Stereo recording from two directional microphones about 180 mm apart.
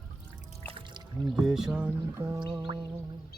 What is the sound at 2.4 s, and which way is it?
Music, 25° right (ahead or behind).